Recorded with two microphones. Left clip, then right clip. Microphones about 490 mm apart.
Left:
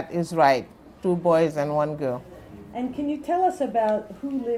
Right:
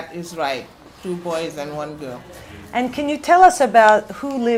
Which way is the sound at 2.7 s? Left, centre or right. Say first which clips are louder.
Right 8 dB; right.